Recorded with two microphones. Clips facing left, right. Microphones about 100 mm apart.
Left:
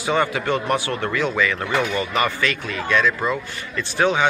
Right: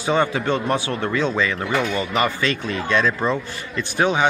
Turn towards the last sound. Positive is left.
turn(degrees=-20)  # may be behind; listen again after turning